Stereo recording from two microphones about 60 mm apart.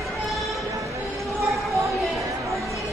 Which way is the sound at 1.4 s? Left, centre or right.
Right.